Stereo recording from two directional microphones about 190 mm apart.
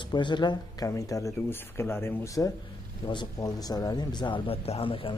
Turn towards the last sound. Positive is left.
turn(degrees=30)  # may be behind; listen again after turning